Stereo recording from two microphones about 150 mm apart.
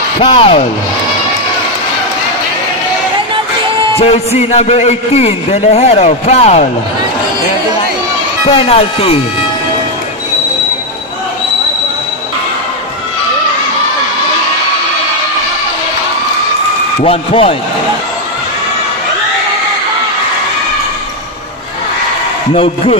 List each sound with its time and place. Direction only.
0.2 s speech: 35° left (ahead or behind)
4.0 s a man's voice: 45° left (ahead or behind)
8.5 s speech: 40° left (ahead or behind)
17.0 s speech: 40° left (ahead or behind)
22.5 s speech: 40° left (ahead or behind)